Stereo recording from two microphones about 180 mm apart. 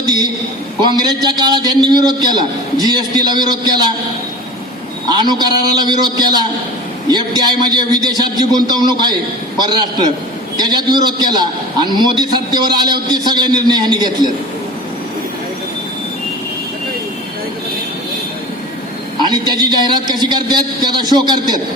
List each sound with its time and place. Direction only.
0.9 s a man's voice: 25° right (ahead or behind)
5.1 s a man's voice: 25° right (ahead or behind)
19.2 s a man's voice: 25° right (ahead or behind)